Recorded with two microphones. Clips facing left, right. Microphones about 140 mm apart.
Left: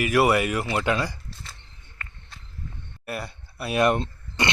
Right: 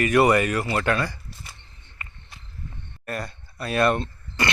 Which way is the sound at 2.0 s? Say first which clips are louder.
Even; 15° right (ahead or behind).